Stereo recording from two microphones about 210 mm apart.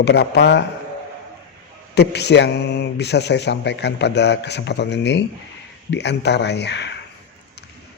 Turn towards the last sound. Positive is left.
turn(degrees=55)  # may be behind; listen again after turning